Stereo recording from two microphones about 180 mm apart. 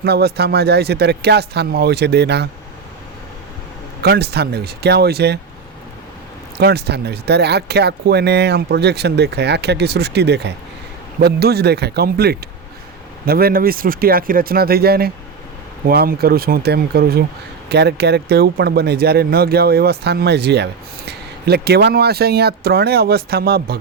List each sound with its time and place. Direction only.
0.0 s speech: 60° right (ahead or behind)
4.0 s speech: 65° right (ahead or behind)
6.6 s speech: 65° right (ahead or behind)